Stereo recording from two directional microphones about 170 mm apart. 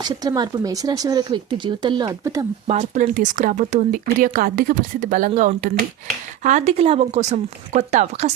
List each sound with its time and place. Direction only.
0.0 s speech: 25° right (ahead or behind)
2.6 s speech: 40° right (ahead or behind)